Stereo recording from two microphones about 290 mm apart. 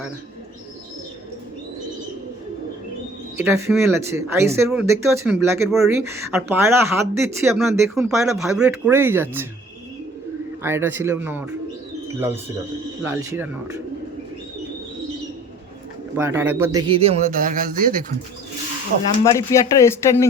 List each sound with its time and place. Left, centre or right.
3.3 s speech: centre
10.6 s speech: centre
16.1 s speech: centre; by 18.0 s right
19.2 s speech: centre